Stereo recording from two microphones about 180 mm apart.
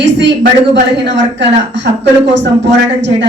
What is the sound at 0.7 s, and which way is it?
Speech, 75° right (ahead or behind).